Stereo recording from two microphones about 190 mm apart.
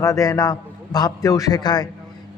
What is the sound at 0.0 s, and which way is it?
A man's voice, 15° left (ahead or behind).